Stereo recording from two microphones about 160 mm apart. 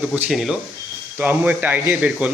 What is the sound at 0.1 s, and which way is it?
Speech, centre (ahead or behind).